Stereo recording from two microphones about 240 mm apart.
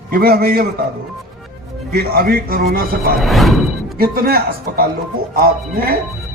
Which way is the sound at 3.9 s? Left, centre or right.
Right.